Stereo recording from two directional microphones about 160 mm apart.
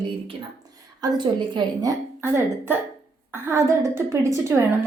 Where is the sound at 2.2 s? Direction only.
15° right (ahead or behind).